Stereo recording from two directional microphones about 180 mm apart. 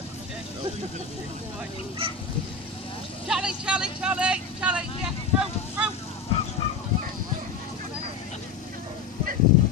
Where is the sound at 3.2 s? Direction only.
5° right (ahead or behind).